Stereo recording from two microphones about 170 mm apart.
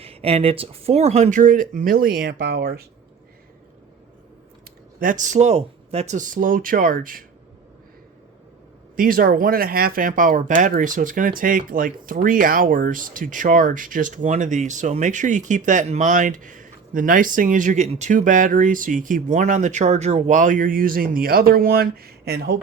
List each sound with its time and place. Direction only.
0.0 s speech: 35° right (ahead or behind); by 2.8 s 70° right (ahead or behind)
4.9 s speech: 50° right (ahead or behind)
9.0 s speech: 55° right (ahead or behind)